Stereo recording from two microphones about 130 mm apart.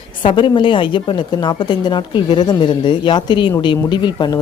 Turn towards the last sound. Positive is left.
turn(degrees=30)  # may be behind; listen again after turning